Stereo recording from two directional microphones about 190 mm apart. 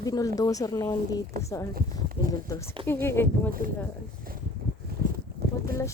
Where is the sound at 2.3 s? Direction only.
15° left (ahead or behind).